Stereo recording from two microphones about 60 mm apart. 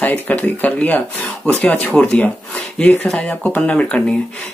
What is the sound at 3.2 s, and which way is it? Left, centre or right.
Speech, left.